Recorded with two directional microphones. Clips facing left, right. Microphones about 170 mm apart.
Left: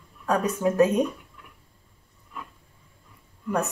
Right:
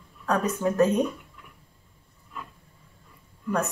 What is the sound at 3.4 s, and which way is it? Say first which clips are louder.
Speech: even; 10° left (ahead or behind).